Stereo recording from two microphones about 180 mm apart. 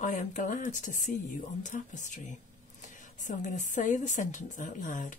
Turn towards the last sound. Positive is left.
turn(degrees=45)  # may be behind; listen again after turning